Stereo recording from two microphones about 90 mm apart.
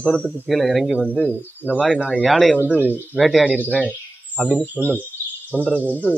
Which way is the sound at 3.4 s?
15° right (ahead or behind).